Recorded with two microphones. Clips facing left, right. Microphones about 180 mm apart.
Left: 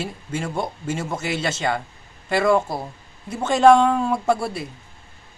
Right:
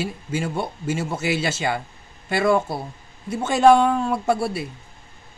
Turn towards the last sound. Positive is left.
turn(degrees=0)  # may be behind; listen again after turning